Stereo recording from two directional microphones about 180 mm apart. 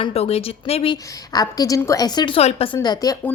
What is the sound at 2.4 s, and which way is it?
Speech, 35° left (ahead or behind).